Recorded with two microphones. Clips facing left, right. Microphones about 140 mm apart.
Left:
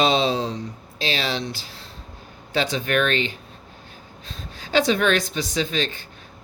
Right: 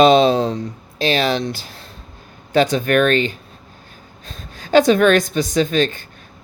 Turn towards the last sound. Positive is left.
turn(degrees=-50)  # may be behind; listen again after turning